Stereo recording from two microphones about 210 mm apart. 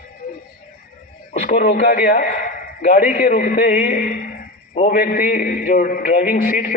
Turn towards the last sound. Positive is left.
turn(degrees=40)  # may be behind; listen again after turning